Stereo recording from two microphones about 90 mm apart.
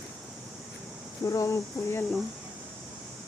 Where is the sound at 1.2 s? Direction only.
35° left (ahead or behind).